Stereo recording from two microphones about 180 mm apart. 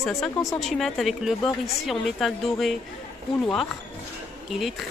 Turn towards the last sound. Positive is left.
turn(degrees=0)  # may be behind; listen again after turning